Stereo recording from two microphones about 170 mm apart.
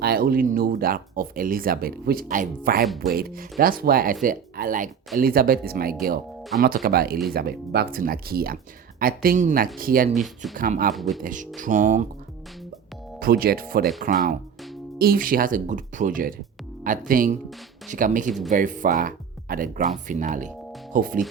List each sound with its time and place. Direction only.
0.0 s speech: 65° right (ahead or behind)
2.8 s speech: centre (ahead or behind)
3.1 s speech: 60° right (ahead or behind)
7.9 s speech: 60° right (ahead or behind)
10.9 s speech: centre (ahead or behind)
11.2 s speech: 50° right (ahead or behind)
13.1 s speech: 60° right (ahead or behind)
14.9 s speech: 60° right (ahead or behind)
18.3 s speech: centre (ahead or behind)
18.5 s speech: 50° right (ahead or behind)